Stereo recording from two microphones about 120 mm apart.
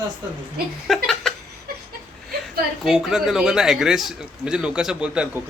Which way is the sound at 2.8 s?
Centre (ahead or behind).